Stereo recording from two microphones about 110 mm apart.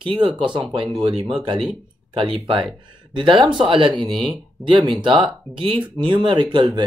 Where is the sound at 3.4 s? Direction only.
50° right (ahead or behind).